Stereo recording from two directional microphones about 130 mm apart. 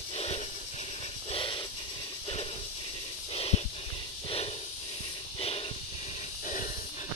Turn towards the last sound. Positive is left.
turn(degrees=45)  # may be behind; listen again after turning